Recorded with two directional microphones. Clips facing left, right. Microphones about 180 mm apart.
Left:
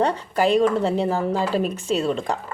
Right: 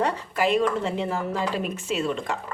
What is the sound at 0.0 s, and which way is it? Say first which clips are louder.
Speech: left 4 dB; 30° left (ahead or behind).